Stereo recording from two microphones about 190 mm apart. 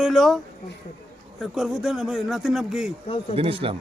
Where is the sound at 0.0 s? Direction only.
Centre (ahead or behind).